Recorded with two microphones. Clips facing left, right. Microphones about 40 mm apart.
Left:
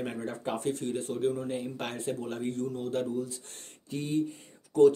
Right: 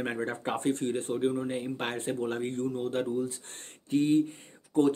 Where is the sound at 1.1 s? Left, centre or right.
Right.